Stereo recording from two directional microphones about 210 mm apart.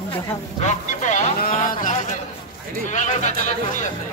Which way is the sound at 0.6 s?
35° left (ahead or behind).